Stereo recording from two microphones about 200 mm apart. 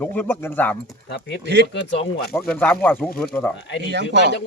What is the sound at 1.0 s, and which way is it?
Speech, 55° left (ahead or behind).